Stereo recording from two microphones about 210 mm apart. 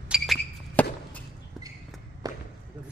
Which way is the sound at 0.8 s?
5° left (ahead or behind).